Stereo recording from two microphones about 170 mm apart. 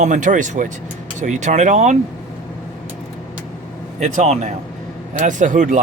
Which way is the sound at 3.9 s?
40° right (ahead or behind).